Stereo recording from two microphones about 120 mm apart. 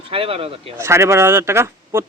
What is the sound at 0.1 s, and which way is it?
Speech, 50° right (ahead or behind).